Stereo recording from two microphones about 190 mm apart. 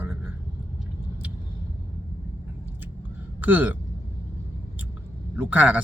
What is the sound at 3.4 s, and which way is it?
Speech, 10° right (ahead or behind).